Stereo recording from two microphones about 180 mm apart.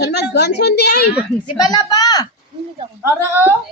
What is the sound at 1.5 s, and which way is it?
Speech, 20° left (ahead or behind).